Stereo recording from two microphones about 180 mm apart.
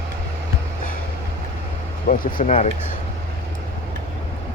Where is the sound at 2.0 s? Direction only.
50° left (ahead or behind).